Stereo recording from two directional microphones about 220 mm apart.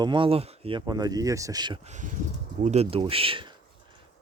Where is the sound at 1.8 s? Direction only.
35° right (ahead or behind).